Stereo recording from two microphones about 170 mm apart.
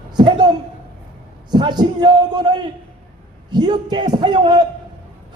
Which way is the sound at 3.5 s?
25° right (ahead or behind).